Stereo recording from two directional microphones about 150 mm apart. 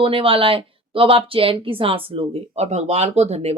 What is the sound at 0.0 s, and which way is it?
Speech, 35° right (ahead or behind).